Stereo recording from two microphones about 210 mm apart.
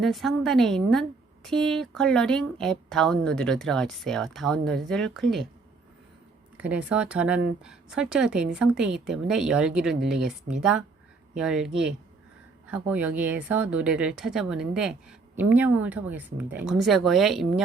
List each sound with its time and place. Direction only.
0.0 s speech: centre (ahead or behind)
6.6 s speech: 5° right (ahead or behind)
12.7 s speech: 5° right (ahead or behind)